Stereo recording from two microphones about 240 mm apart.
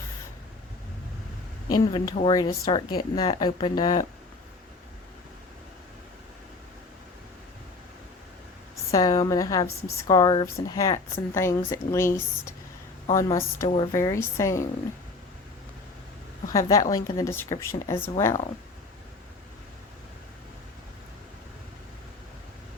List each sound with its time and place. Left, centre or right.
1.7 s speech: centre
8.9 s speech: centre
16.5 s speech: centre